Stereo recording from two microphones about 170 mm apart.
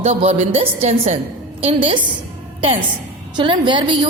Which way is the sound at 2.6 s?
30° right (ahead or behind).